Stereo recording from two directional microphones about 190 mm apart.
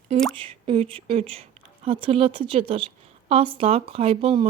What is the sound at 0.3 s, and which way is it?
Speech, 30° right (ahead or behind).